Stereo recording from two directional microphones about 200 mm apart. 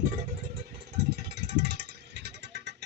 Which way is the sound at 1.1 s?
55° right (ahead or behind).